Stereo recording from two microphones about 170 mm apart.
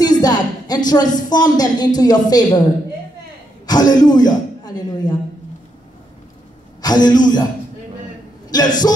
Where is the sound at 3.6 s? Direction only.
25° left (ahead or behind).